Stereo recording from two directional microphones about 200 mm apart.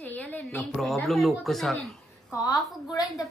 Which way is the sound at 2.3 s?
15° left (ahead or behind).